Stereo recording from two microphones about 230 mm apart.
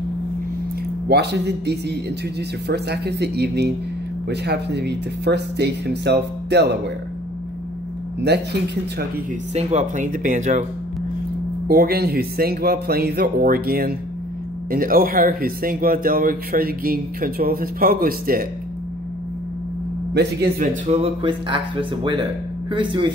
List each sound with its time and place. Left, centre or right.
1.0 s speech: right
9.5 s speech: right
11.6 s speech: right
20.2 s speech: right
20.9 s speech: right